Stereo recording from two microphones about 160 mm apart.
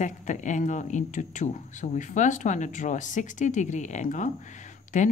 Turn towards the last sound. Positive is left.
turn(degrees=50)  # may be behind; listen again after turning